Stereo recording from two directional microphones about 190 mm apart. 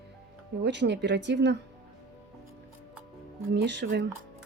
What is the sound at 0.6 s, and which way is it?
Speech, 65° right (ahead or behind).